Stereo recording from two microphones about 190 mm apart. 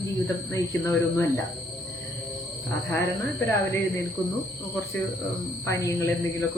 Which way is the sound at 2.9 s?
15° left (ahead or behind).